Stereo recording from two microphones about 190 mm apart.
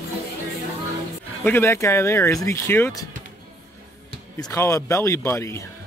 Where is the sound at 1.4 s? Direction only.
10° left (ahead or behind).